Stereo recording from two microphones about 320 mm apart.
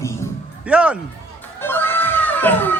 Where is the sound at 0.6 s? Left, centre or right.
Centre.